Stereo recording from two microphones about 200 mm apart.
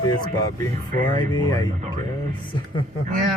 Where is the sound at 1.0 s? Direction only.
25° left (ahead or behind).